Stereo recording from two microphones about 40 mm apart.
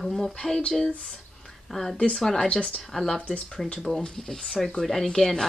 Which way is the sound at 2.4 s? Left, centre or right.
Left.